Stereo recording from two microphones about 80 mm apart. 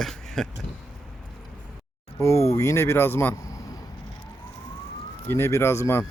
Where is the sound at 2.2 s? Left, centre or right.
Left.